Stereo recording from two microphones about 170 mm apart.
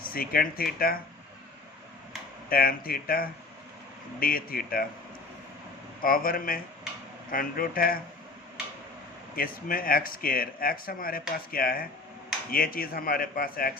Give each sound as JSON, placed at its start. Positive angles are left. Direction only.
{"t": 0.0, "sound": "speech", "side_deg": 60}
{"t": 2.5, "sound": "speech", "side_deg": 60}
{"t": 6.0, "sound": "speech", "side_deg": 55}
{"t": 9.3, "sound": "speech", "side_deg": 60}